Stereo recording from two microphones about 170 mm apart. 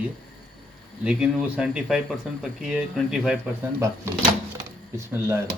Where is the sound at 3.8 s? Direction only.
15° right (ahead or behind).